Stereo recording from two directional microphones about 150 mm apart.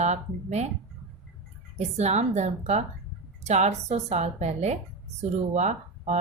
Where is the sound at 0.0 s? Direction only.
50° right (ahead or behind).